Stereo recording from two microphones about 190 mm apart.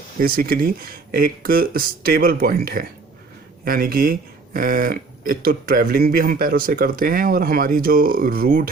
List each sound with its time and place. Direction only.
0.2 s speech: 50° right (ahead or behind)